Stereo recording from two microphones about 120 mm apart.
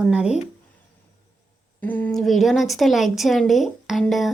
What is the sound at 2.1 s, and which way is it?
A woman's voice, centre (ahead or behind).